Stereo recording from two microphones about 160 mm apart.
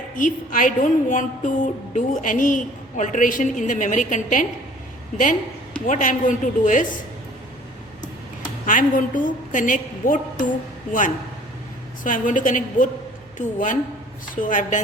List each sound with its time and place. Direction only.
0.2 s a woman's voice: 55° left (ahead or behind)
5.8 s a woman's voice: 55° left (ahead or behind)
8.6 s a woman's voice: 55° left (ahead or behind)
12.0 s a woman's voice: 55° left (ahead or behind)